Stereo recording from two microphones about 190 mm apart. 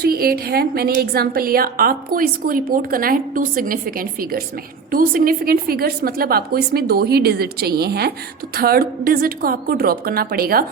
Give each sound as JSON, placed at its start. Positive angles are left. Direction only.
{"t": 0.0, "sound": "a woman's voice", "side_deg": -50}